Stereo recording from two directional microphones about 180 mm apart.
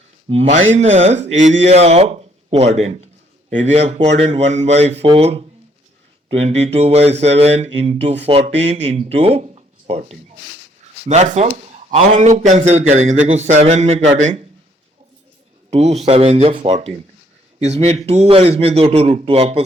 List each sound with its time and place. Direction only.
0.3 s a man's voice: 40° right (ahead or behind)
11.1 s a man's voice: 40° right (ahead or behind)
15.7 s a man's voice: 35° right (ahead or behind)